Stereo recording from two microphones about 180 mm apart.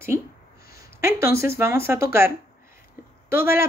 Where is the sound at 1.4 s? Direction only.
15° right (ahead or behind).